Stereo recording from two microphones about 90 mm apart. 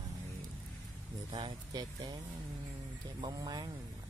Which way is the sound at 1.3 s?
90° right.